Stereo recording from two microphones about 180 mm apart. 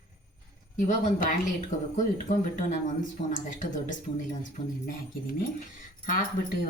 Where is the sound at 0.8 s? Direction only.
45° left (ahead or behind).